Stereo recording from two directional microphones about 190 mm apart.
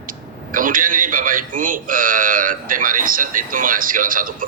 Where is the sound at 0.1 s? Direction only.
45° right (ahead or behind).